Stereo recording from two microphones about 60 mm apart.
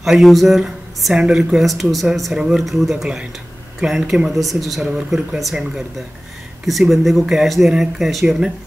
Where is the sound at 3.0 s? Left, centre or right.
Centre.